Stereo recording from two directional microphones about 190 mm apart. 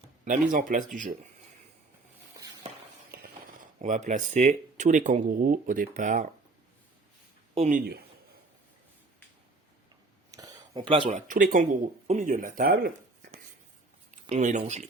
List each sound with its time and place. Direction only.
0.3 s speech: 45° right (ahead or behind)
3.1 s a sound: 55° right (ahead or behind)
3.8 s speech: 40° right (ahead or behind)
7.5 s speech: 35° right (ahead or behind)
10.3 s a sound: 20° right (ahead or behind)
11.3 s speech: 45° right (ahead or behind)
14.3 s speech: 40° right (ahead or behind)